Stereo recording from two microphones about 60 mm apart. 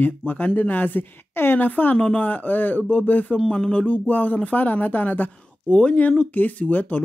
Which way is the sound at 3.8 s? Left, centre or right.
Left.